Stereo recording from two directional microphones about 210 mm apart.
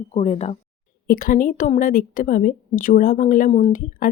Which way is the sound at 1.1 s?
45° left (ahead or behind).